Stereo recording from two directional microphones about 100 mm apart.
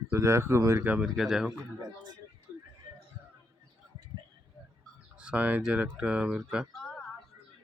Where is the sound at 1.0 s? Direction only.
5° right (ahead or behind).